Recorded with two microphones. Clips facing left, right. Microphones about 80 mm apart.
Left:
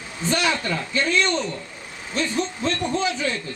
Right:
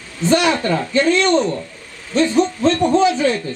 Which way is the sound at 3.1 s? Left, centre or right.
Right.